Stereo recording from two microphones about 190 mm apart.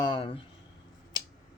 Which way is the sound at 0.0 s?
25° left (ahead or behind).